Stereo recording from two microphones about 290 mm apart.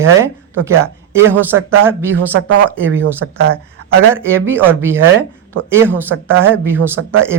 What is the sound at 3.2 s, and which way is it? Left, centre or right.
Speech, right.